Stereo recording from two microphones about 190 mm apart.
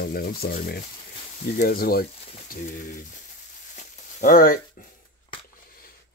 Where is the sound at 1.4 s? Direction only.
50° left (ahead or behind).